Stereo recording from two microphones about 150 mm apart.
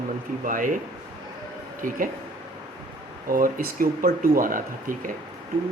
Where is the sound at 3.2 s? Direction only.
70° right (ahead or behind).